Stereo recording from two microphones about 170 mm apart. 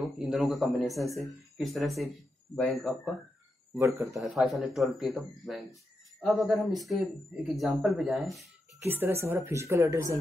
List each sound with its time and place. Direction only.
0.0 s speech: centre (ahead or behind)
3.7 s a woman's voice: 15° right (ahead or behind)
4.1 s speech: centre (ahead or behind)
8.8 s a woman's voice: 10° right (ahead or behind)